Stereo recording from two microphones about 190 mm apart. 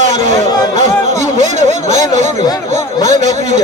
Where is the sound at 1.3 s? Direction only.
40° right (ahead or behind).